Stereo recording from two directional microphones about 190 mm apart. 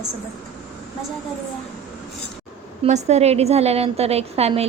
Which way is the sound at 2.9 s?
35° right (ahead or behind).